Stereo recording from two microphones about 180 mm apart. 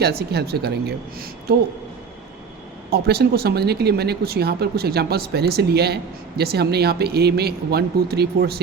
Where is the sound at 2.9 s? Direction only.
65° right (ahead or behind).